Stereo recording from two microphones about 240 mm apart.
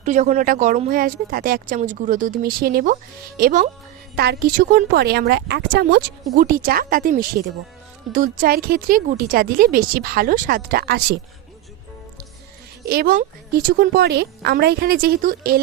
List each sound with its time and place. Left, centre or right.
0.0 s speech: right
12.8 s speech: right